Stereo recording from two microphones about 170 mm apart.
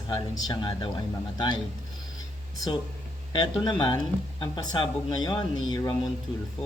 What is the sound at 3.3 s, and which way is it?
Speech, 25° left (ahead or behind).